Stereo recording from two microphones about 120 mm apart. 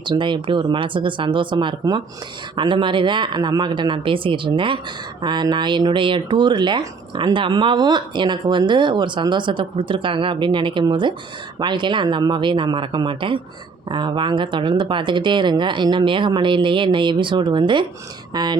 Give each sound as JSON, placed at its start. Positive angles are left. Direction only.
{"t": 0.0, "sound": "speech", "side_deg": -40}